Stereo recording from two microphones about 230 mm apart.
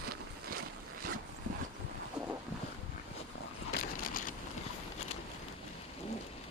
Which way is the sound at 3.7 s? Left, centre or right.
Left.